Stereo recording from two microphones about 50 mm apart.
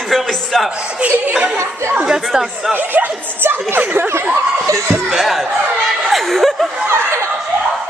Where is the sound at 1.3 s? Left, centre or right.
Centre.